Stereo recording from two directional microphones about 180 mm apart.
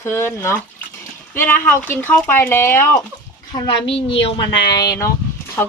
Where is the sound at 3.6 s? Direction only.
30° left (ahead or behind).